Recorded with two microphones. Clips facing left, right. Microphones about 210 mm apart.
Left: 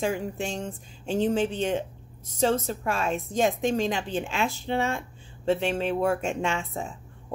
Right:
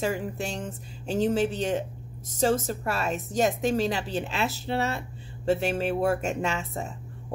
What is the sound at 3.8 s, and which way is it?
Speech, 40° right (ahead or behind).